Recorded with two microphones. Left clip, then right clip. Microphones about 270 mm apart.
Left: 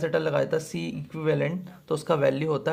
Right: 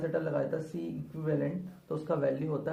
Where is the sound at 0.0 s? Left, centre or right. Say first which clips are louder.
Left 7 dB; left.